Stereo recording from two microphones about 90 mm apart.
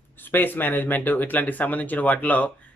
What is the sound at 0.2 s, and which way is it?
Speech, 20° left (ahead or behind).